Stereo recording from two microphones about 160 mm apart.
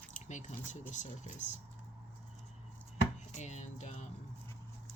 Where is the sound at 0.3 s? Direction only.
50° left (ahead or behind).